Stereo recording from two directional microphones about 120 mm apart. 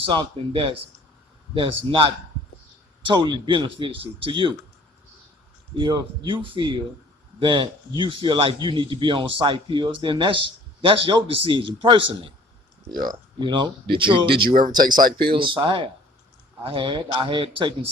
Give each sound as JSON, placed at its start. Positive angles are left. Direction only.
{"t": 0.0, "sound": "a man's voice", "side_deg": -45}
{"t": 5.7, "sound": "a man's voice", "side_deg": -45}
{"t": 12.9, "sound": "a man's voice", "side_deg": -35}